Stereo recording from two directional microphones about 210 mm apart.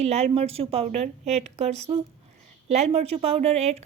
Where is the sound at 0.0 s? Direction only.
30° right (ahead or behind).